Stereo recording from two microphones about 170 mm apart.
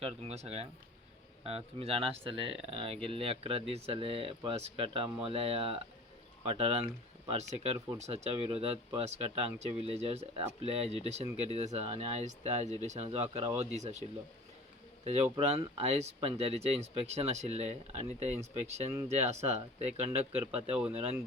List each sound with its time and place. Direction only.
0.0 s speech: 35° right (ahead or behind)
15.0 s speech: 40° right (ahead or behind)
20.7 s speech: 10° right (ahead or behind)